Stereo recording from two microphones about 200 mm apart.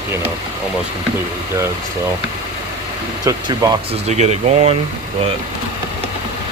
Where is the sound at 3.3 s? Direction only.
20° right (ahead or behind).